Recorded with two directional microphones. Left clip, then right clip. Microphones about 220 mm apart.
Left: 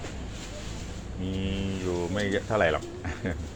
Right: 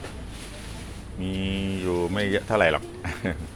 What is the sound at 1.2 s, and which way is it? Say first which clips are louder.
Music: right 3 dB; 55° right (ahead or behind).